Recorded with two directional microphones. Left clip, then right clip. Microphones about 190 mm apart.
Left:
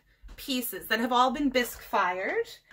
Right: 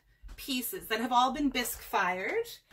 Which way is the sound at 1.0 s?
30° left (ahead or behind).